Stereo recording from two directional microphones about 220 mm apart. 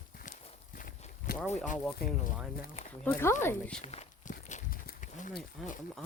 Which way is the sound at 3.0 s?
10° left (ahead or behind).